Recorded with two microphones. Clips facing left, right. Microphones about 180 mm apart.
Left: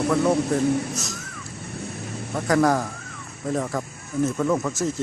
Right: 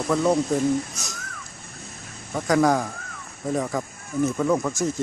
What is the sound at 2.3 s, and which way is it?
Speech, centre (ahead or behind).